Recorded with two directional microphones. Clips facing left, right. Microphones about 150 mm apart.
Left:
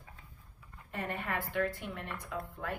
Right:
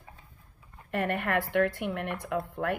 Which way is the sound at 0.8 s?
70° right (ahead or behind).